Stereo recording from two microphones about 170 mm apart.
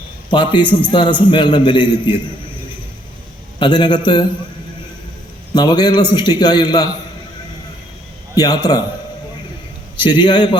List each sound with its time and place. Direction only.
0.3 s a man's voice: 30° left (ahead or behind)
3.6 s a man's voice: 25° left (ahead or behind)
5.5 s a man's voice: 25° left (ahead or behind)
8.4 s a man's voice: 25° left (ahead or behind)
10.0 s a man's voice: 25° left (ahead or behind)